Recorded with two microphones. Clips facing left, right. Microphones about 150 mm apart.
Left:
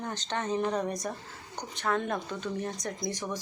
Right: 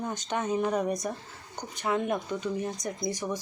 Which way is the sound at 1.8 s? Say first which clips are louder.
Right 2 dB; 15° right (ahead or behind).